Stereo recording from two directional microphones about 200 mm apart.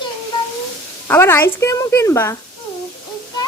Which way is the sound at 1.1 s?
10° left (ahead or behind).